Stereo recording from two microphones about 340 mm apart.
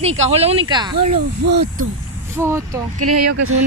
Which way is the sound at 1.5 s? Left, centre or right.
Right.